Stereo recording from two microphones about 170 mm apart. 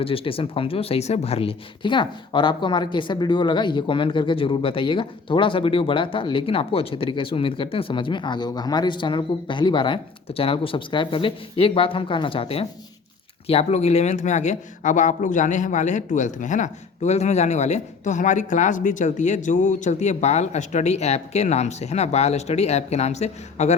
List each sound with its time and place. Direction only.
0.0 s speech: 35° left (ahead or behind)